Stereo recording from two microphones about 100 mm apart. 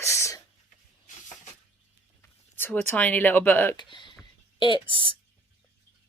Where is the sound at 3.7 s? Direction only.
50° left (ahead or behind).